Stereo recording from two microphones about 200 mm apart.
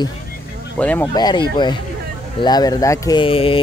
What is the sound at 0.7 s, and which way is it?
Speech, 10° left (ahead or behind).